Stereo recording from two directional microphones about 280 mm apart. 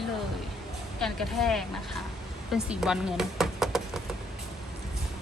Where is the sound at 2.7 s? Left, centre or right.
Centre.